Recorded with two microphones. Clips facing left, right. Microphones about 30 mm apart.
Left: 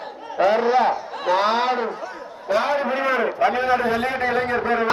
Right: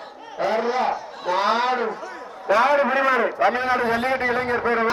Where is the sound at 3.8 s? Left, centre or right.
Right.